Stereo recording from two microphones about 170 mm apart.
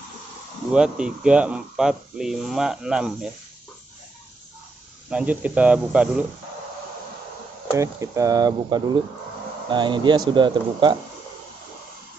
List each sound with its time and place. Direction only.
0.7 s speech: 5° right (ahead or behind)
5.1 s speech: 10° right (ahead or behind)
7.7 s speech: 20° right (ahead or behind)